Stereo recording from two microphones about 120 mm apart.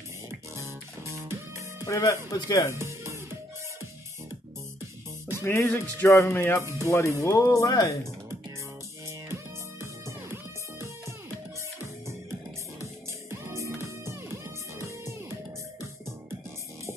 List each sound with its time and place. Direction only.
0.6 s music: 25° right (ahead or behind)
1.9 s speech: 25° left (ahead or behind)
2.7 s music: 25° right (ahead or behind)
5.4 s speech: 20° left (ahead or behind)
6.6 s speech: 25° right (ahead or behind)
7.2 s speech: 25° left (ahead or behind)
9.3 s music: 20° right (ahead or behind)
12.8 s music: 25° right (ahead or behind)